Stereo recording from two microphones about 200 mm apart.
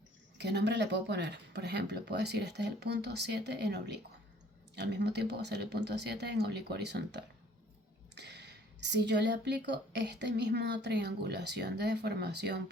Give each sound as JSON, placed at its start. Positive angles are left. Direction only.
{"t": 0.3, "sound": "a woman's voice", "side_deg": -55}